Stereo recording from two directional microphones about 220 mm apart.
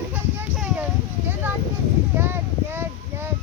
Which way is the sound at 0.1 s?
5° right (ahead or behind).